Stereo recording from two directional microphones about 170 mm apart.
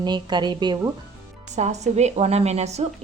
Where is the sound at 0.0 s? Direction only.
25° right (ahead or behind).